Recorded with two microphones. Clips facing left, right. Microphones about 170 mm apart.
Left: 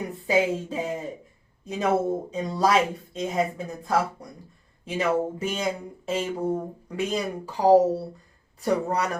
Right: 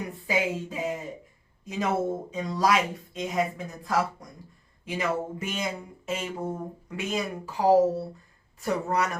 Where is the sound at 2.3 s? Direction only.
30° left (ahead or behind).